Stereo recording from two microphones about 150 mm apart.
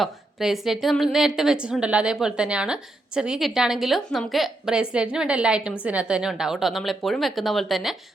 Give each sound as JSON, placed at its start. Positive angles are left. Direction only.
{"t": 0.0, "sound": "a woman's voice", "side_deg": 0}